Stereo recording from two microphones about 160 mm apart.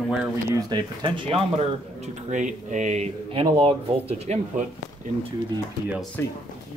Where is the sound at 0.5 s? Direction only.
25° right (ahead or behind); by 4.6 s 45° right (ahead or behind).